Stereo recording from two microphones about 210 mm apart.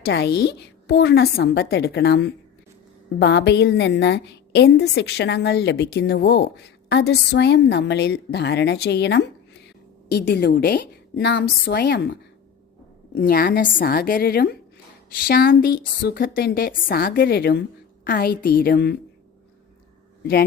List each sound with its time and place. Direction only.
0.0 s a woman's voice: 50° left (ahead or behind)
11.2 s a woman's voice: 55° left (ahead or behind)
13.1 s a woman's voice: 45° left (ahead or behind)